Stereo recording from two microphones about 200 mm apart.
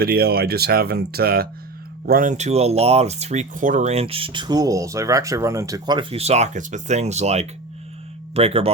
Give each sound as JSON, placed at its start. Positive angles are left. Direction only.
{"t": 0.0, "sound": "speech", "side_deg": -50}